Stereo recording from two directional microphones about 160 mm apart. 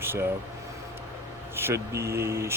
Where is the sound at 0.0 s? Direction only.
15° right (ahead or behind).